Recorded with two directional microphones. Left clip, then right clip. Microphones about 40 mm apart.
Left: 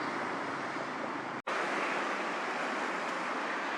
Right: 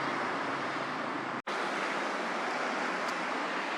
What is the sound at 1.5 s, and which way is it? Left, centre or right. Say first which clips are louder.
Vehicle: left 2 dB; left.